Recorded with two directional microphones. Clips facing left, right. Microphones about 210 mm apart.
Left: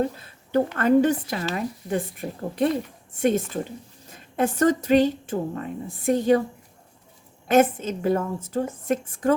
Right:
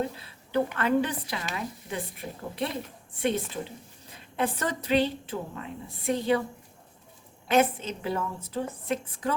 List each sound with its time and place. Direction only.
0.0 s a woman's voice: 45° left (ahead or behind)
7.4 s a woman's voice: 45° left (ahead or behind)